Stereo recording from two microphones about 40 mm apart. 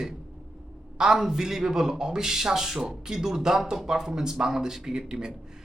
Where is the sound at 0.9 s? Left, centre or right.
Centre.